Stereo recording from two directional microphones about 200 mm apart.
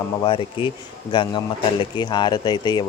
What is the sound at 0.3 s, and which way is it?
Speech, 25° left (ahead or behind).